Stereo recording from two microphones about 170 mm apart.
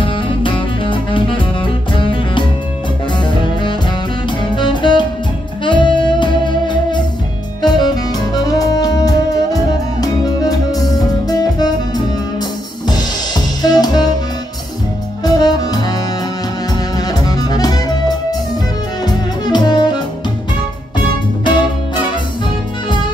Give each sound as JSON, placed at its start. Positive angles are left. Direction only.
{"t": 0.0, "sound": "music", "side_deg": 30}
{"t": 4.4, "sound": "music", "side_deg": 25}
{"t": 12.8, "sound": "drum kit", "side_deg": 25}
{"t": 15.2, "sound": "music", "side_deg": 25}